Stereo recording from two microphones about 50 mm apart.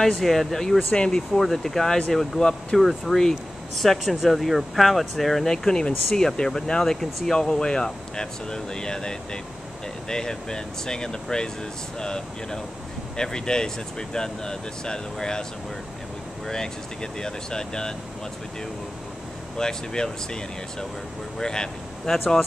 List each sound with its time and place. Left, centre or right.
0.0 s speech: centre
0.9 s speech: centre
1.3 s speech: centre
16.4 s speech: centre
19.5 s speech: centre
21.4 s speech: centre